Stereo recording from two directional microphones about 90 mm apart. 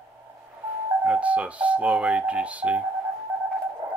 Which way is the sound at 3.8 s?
25° right (ahead or behind).